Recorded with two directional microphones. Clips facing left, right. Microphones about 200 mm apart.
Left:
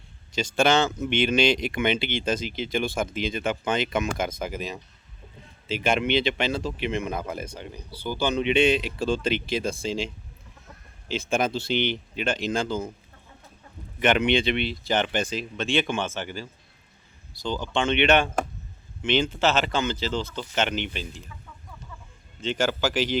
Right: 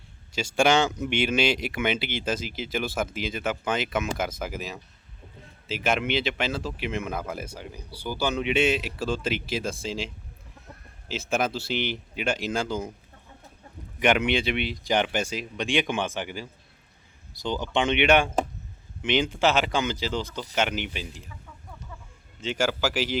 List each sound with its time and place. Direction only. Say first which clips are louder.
0.3 s speech: even; 10° right (ahead or behind)
11.1 s speech: left 2 dB; 5° right (ahead or behind)
14.0 s speech: left 1 dB; 10° right (ahead or behind)
22.4 s speech: left 1 dB; 10° right (ahead or behind)